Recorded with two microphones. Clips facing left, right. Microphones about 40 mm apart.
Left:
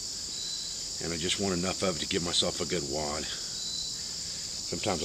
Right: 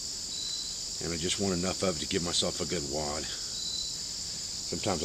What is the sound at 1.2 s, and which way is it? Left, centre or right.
Cricket, left.